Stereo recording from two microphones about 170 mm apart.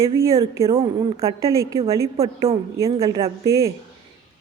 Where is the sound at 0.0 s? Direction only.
20° right (ahead or behind).